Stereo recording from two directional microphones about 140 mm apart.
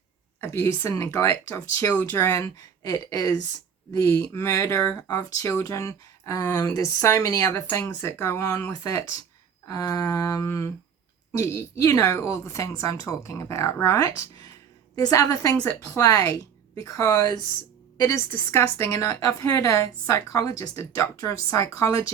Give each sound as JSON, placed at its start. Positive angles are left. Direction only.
{"t": 0.4, "sound": "speech", "side_deg": 20}